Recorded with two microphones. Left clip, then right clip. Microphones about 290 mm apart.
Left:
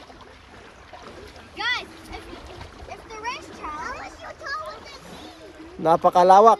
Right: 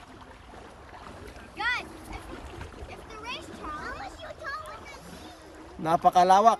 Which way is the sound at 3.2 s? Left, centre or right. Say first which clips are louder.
Left 6 dB; left.